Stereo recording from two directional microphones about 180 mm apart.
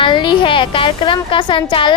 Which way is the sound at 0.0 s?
25° left (ahead or behind).